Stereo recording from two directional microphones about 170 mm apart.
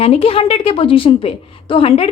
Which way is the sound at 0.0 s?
35° left (ahead or behind).